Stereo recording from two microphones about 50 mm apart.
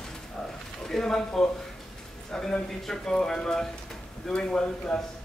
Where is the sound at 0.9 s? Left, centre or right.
Centre.